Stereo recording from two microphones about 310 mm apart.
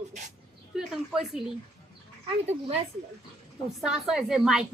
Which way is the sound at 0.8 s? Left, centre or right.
Centre.